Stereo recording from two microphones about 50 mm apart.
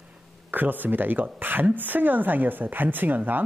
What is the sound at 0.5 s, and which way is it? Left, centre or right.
A woman's voice, right.